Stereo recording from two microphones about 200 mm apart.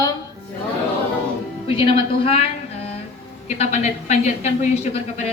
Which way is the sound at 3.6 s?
35° left (ahead or behind).